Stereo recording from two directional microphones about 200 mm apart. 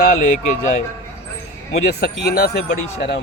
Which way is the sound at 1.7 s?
50° left (ahead or behind).